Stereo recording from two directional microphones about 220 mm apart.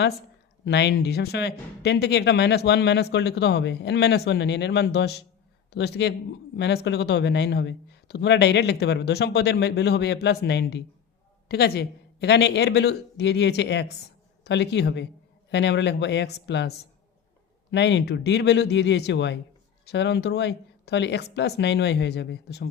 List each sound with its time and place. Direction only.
0.6 s speech: 50° left (ahead or behind)